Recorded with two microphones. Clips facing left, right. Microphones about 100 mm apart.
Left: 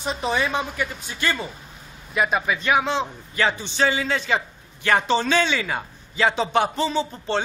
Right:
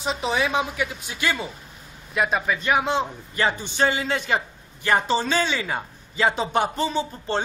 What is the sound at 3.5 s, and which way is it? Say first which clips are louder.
Speech: left 1 dB; 45° right (ahead or behind).